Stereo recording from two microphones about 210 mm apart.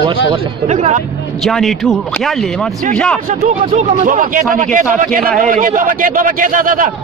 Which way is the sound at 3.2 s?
30° right (ahead or behind).